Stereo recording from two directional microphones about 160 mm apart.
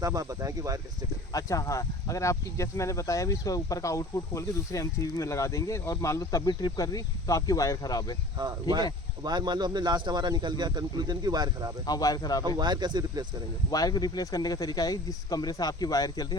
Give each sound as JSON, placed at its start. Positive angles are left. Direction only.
{"t": 0.0, "sound": "speech", "side_deg": -20}
{"t": 1.3, "sound": "speech", "side_deg": 20}
{"t": 8.7, "sound": "speech", "side_deg": -25}
{"t": 11.9, "sound": "speech", "side_deg": 25}
{"t": 12.5, "sound": "speech", "side_deg": -25}
{"t": 13.7, "sound": "speech", "side_deg": 25}